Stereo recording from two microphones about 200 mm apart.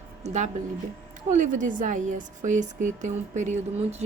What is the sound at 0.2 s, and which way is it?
A woman's voice, 35° right (ahead or behind).